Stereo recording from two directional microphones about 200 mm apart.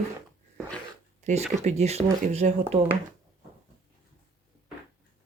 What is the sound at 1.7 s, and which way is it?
Speech, 35° right (ahead or behind).